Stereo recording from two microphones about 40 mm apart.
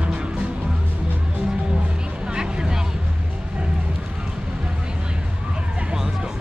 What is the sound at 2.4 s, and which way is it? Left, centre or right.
Vehicle, centre.